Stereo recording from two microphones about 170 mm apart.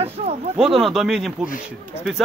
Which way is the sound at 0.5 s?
Centre (ahead or behind).